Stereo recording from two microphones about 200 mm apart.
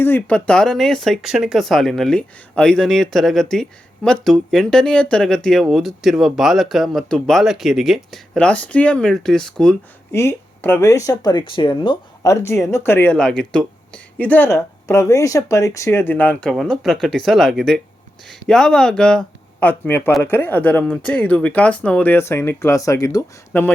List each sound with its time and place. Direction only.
0.0 s speech: 10° left (ahead or behind)